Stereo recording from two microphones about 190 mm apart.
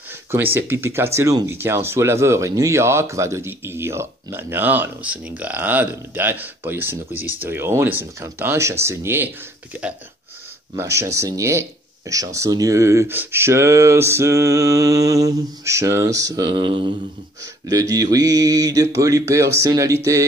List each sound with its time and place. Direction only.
0.3 s speech: 10° right (ahead or behind)
10.8 s speech: 15° right (ahead or behind)